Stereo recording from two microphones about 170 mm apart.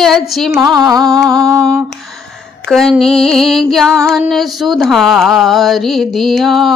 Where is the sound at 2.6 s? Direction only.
Centre (ahead or behind).